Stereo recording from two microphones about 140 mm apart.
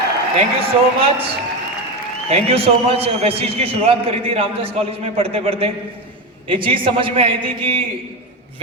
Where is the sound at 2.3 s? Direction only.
45° right (ahead or behind).